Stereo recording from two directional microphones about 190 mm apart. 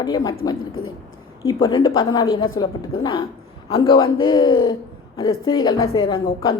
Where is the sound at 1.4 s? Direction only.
15° left (ahead or behind).